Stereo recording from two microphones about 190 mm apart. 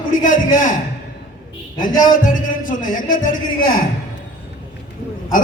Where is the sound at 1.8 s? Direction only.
45° left (ahead or behind).